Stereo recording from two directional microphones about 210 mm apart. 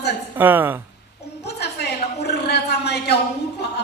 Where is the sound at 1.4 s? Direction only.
50° left (ahead or behind).